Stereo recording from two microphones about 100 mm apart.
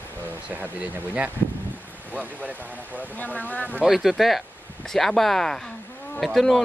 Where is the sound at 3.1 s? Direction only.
15° left (ahead or behind).